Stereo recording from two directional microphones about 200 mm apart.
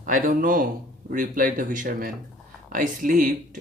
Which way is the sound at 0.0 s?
40° right (ahead or behind).